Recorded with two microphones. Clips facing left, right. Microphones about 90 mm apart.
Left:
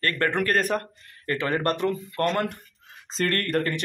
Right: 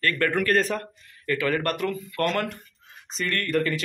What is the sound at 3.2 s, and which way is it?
Speech, 50° left (ahead or behind).